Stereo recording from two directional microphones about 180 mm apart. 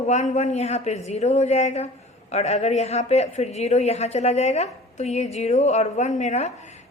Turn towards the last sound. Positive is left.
turn(degrees=40)  # may be behind; listen again after turning